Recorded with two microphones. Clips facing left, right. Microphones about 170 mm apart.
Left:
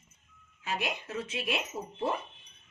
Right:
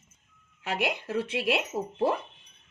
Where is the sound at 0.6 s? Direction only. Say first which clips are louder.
Right 5 dB; 70° right (ahead or behind).